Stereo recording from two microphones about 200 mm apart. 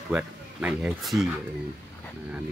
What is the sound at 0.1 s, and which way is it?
Speech, 5° right (ahead or behind).